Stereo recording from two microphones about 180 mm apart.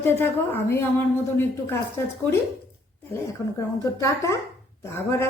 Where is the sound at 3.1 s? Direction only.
20° left (ahead or behind).